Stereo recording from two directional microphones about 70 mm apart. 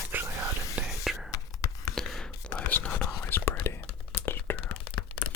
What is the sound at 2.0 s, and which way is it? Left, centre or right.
Whispering, centre.